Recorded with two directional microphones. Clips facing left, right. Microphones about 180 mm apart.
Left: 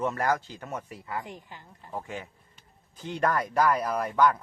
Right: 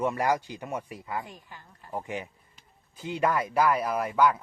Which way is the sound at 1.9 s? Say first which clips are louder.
Right 2 dB; 15° right (ahead or behind).